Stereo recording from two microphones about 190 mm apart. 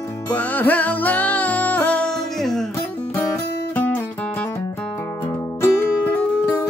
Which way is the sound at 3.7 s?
10° left (ahead or behind).